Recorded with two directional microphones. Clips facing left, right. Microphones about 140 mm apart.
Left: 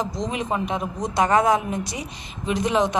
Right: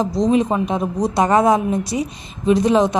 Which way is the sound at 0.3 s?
25° right (ahead or behind).